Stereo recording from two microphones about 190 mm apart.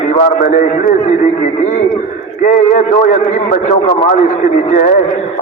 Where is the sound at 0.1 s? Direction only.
40° left (ahead or behind).